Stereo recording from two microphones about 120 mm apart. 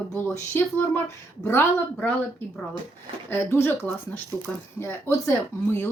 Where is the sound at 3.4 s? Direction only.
20° left (ahead or behind).